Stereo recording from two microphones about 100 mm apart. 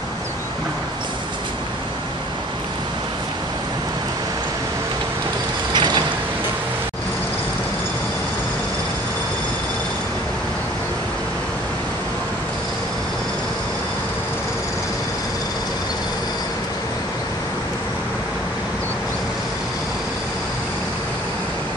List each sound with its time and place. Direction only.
5.7 s vehicle: 50° right (ahead or behind)